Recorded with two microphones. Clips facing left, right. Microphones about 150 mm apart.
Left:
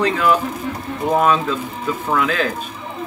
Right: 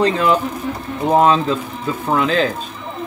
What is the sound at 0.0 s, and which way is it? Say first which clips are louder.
Speech: right 1 dB; 25° right (ahead or behind).